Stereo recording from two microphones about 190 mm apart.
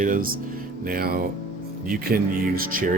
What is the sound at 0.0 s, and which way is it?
Speech, 45° right (ahead or behind).